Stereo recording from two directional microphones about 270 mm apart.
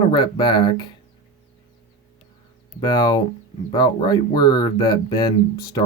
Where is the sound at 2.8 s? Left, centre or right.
Centre.